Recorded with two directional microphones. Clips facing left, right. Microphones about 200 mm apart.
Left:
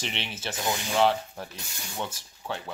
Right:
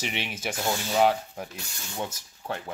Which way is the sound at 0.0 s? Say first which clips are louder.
Right 3 dB; 10° right (ahead or behind).